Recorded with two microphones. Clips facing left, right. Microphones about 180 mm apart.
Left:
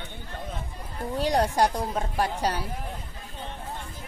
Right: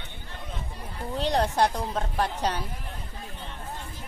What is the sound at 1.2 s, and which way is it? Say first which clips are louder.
A woman's voice: left 1 dB; 10° left (ahead or behind).